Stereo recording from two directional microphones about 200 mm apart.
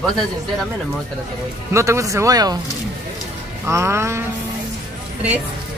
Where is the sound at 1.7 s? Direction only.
15° right (ahead or behind).